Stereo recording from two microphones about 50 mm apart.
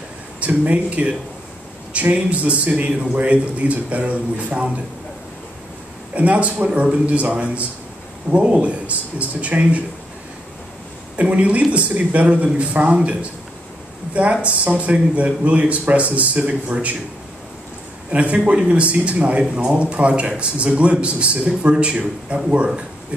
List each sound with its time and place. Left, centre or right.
0.4 s speech: right
6.1 s speech: right
11.1 s speech: right
18.1 s speech: right